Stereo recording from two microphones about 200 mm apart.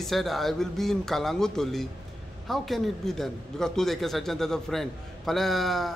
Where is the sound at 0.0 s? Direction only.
Centre (ahead or behind).